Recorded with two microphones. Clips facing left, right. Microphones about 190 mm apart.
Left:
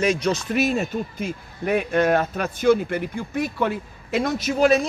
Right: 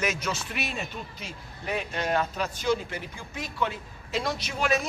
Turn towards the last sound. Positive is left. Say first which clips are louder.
# left 9 dB
turn(degrees=40)  # may be behind; listen again after turning